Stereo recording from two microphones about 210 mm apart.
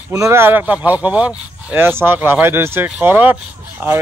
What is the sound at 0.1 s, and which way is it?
A man's voice, 15° right (ahead or behind).